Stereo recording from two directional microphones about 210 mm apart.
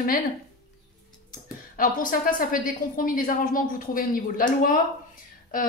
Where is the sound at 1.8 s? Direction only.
40° left (ahead or behind).